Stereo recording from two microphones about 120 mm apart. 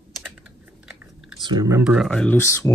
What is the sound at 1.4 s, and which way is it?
Speech, 35° right (ahead or behind).